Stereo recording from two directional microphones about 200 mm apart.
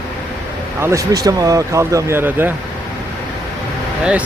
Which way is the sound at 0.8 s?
15° right (ahead or behind).